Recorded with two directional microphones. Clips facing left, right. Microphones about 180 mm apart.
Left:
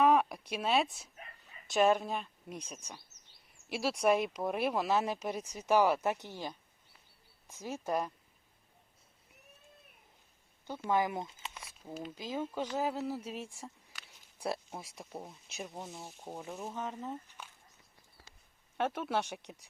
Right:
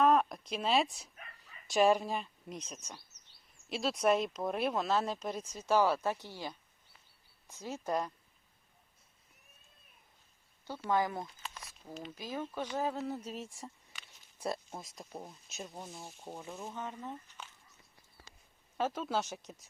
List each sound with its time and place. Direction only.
0.0 s a sound: 10° left (ahead or behind)
0.5 s speech: 5° left (ahead or behind)
2.6 s speech: 10° left (ahead or behind)
10.7 s speech: 15° left (ahead or behind)
12.4 s speech: 10° left (ahead or behind)
13.6 s a sound: 5° left (ahead or behind)
15.3 s speech: 15° left (ahead or behind)
18.9 s speech: 10° left (ahead or behind)